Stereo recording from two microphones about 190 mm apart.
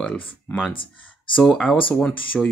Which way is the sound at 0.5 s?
5° left (ahead or behind).